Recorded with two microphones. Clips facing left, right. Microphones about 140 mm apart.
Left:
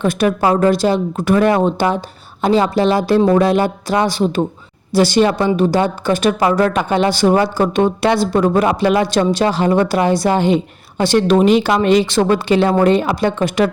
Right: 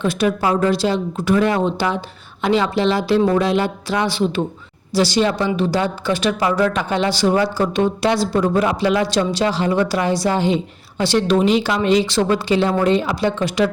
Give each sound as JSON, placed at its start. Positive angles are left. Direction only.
{"t": 0.0, "sound": "speech", "side_deg": 50}
{"t": 4.9, "sound": "speech", "side_deg": 55}